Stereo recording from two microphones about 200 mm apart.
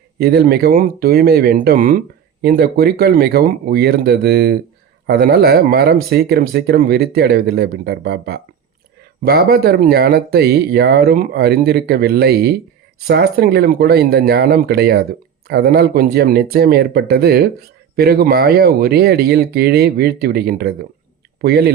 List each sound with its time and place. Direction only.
0.2 s speech: 50° right (ahead or behind)